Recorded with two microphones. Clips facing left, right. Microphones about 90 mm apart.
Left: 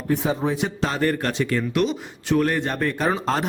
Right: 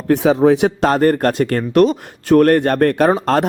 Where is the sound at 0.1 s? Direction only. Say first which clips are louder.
Right 11 dB; 85° right.